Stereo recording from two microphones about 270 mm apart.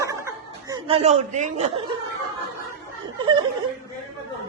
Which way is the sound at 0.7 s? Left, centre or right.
Right.